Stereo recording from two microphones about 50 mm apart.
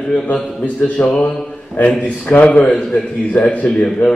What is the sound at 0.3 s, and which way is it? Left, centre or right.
A man's voice, left.